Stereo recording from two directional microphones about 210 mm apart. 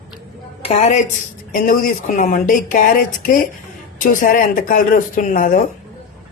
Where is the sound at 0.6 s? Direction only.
30° left (ahead or behind).